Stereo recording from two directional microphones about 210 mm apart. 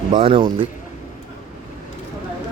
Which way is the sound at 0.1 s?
25° right (ahead or behind).